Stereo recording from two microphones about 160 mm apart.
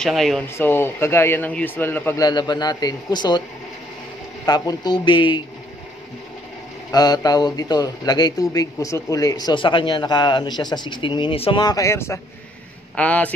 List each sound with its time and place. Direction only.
0.0 s speech: centre (ahead or behind)
0.6 s a man's voice: 15° left (ahead or behind)
2.2 s speech: 25° left (ahead or behind)
4.5 s speech: 25° left (ahead or behind)
6.9 s a man's voice: 25° left (ahead or behind); by 13.3 s 10° left (ahead or behind)